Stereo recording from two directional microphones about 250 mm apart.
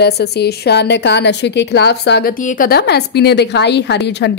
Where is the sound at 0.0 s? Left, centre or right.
Left.